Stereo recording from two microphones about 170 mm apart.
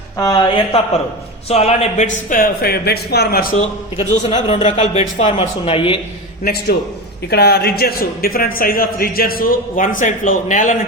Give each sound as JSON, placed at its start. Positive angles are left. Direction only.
{"t": 0.2, "sound": "speech", "side_deg": 25}
{"t": 2.3, "sound": "a man's voice", "side_deg": 60}
{"t": 4.3, "sound": "speech", "side_deg": 40}
{"t": 6.4, "sound": "a man's voice", "side_deg": 65}